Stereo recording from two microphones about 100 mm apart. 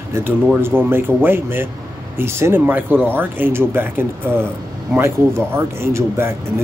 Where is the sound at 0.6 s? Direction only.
20° right (ahead or behind).